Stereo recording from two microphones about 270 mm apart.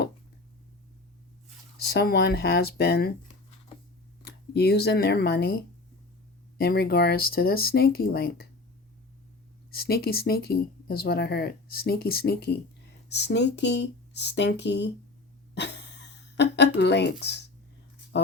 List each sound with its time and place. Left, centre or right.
1.9 s speech: left
4.2 s speech: left
6.6 s speech: left
9.7 s speech: left
15.5 s a sound: left
18.1 s speech: left